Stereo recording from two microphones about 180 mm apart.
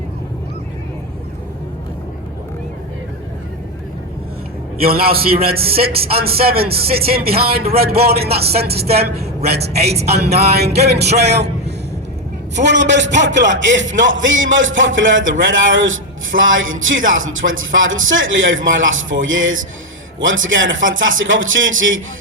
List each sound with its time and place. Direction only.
4.8 s a man's voice: 55° right (ahead or behind)
12.6 s speech: 80° right